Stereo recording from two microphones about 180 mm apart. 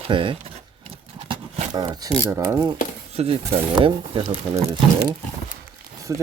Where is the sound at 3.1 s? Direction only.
35° right (ahead or behind).